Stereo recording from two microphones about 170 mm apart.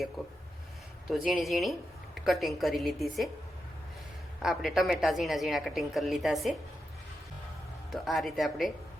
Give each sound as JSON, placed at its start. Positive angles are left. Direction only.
{"t": 0.2, "sound": "a woman's voice", "side_deg": 0}
{"t": 4.4, "sound": "a woman's voice", "side_deg": 0}
{"t": 7.9, "sound": "a woman's voice", "side_deg": 0}